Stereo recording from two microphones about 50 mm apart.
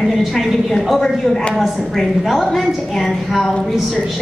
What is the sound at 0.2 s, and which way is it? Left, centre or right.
A woman's voice, centre.